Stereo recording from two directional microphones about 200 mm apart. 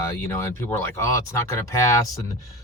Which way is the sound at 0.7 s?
10° left (ahead or behind).